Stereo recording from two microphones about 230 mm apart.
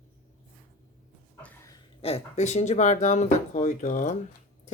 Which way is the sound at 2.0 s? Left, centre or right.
Left.